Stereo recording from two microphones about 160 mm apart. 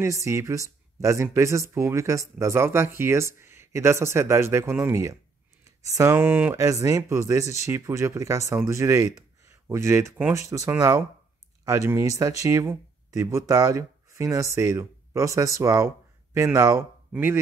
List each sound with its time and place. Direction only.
0.0 s speech: 20° right (ahead or behind)